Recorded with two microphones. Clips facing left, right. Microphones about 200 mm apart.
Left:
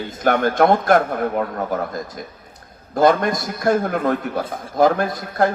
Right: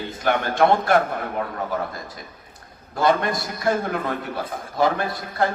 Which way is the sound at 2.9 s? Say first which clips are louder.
Left 5 dB; 45° left (ahead or behind).